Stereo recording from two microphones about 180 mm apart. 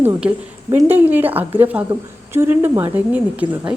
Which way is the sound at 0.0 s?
10° right (ahead or behind).